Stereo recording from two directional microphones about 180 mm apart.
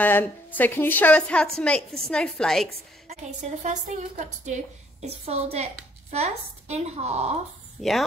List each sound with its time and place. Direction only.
0.0 s a woman's voice: 10° left (ahead or behind)
3.6 s a woman's voice: 40° right (ahead or behind)
7.8 s speech: 5° left (ahead or behind)